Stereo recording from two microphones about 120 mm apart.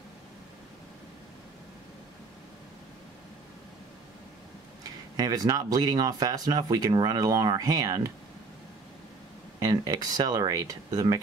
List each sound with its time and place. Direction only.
5.1 s speech: 30° right (ahead or behind)
9.6 s speech: 30° right (ahead or behind)